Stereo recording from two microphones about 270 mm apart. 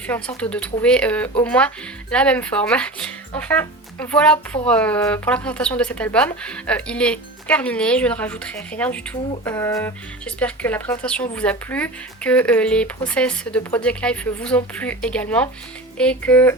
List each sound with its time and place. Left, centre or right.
0.1 s speech: centre